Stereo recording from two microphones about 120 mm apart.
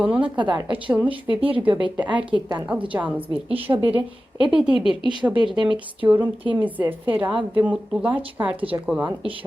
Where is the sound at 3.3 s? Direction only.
50° right (ahead or behind).